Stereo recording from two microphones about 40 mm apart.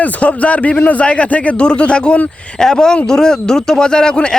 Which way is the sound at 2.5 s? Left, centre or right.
Centre.